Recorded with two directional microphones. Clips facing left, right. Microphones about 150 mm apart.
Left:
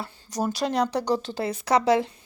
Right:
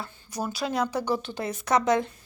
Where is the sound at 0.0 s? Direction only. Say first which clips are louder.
Left 4 dB; 35° left (ahead or behind).